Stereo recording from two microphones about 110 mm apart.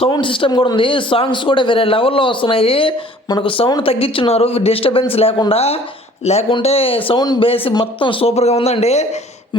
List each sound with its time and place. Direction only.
0.1 s speech: 50° left (ahead or behind); by 5.8 s 65° left (ahead or behind)
6.2 s speech: 80° left
6.6 s speech: 65° left (ahead or behind)
7.2 s speech: 40° left (ahead or behind)
7.4 s speech: 55° left (ahead or behind)
7.7 s speech: 45° left (ahead or behind)
8.4 s speech: 75° left (ahead or behind)